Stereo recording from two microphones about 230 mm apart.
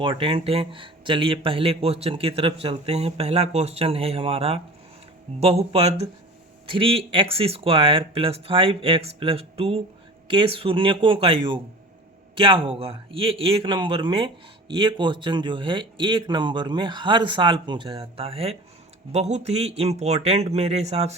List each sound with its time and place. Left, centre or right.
0.0 s speech: right